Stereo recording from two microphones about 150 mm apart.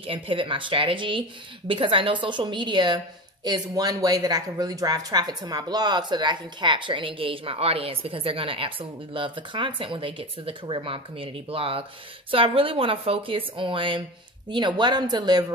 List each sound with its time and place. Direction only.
0.0 s speech: 35° right (ahead or behind)